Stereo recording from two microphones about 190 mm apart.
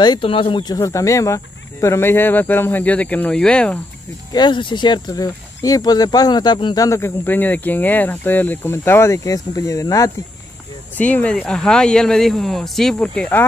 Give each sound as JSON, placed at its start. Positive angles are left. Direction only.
{"t": 0.0, "sound": "speech", "side_deg": 25}
{"t": 4.3, "sound": "speech", "side_deg": 25}